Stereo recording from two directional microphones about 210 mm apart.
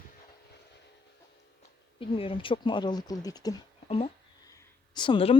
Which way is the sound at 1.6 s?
25° left (ahead or behind).